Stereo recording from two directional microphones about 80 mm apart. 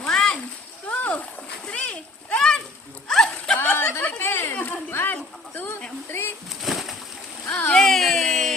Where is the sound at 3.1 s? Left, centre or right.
Centre.